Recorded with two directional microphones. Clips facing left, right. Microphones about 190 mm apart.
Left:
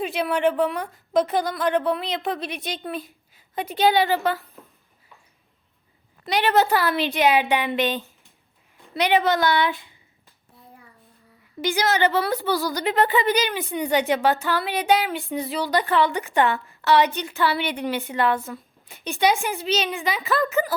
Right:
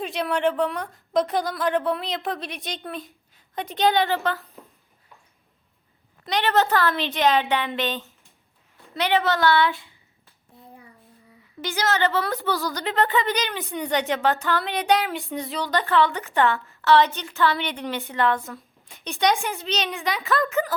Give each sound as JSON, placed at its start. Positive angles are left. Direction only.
{"t": 0.0, "sound": "a woman's voice", "side_deg": 5}
{"t": 4.1, "sound": "a woman's voice", "side_deg": 15}
{"t": 6.2, "sound": "a woman's voice", "side_deg": 10}
{"t": 11.6, "sound": "a woman's voice", "side_deg": 15}
{"t": 17.7, "sound": "a woman's voice", "side_deg": 5}